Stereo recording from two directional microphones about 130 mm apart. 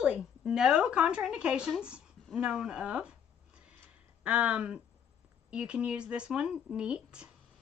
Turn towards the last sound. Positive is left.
turn(degrees=-5)  # may be behind; listen again after turning